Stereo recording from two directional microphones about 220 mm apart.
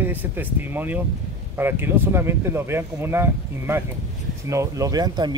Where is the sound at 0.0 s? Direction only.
10° right (ahead or behind).